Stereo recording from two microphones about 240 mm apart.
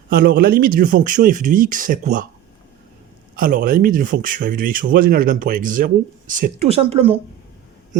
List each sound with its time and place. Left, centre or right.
0.1 s speech: right
3.3 s speech: right